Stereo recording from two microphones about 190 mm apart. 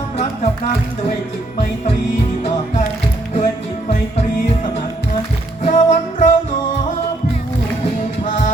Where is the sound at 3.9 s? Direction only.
35° left (ahead or behind).